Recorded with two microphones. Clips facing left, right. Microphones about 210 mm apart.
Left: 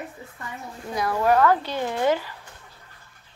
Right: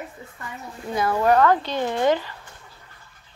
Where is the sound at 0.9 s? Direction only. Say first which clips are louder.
Right 2 dB; centre (ahead or behind).